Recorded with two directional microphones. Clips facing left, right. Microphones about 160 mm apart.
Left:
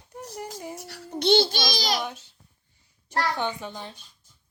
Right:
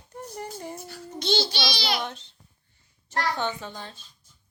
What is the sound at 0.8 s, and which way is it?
A child's voice, 70° left (ahead or behind).